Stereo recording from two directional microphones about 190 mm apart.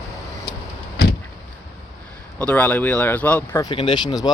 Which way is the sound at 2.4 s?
5° left (ahead or behind).